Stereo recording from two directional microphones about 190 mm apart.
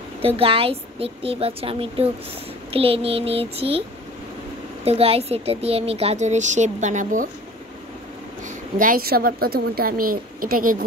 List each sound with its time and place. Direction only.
0.2 s speech: 30° right (ahead or behind)
2.7 s child singing: 30° right (ahead or behind)
4.8 s speech: 30° right (ahead or behind)
8.7 s a woman's voice: 45° right (ahead or behind)